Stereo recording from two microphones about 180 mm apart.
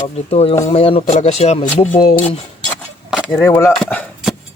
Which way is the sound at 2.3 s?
5° left (ahead or behind).